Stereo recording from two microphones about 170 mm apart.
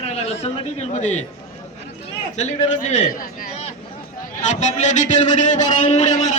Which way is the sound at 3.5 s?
40° left (ahead or behind).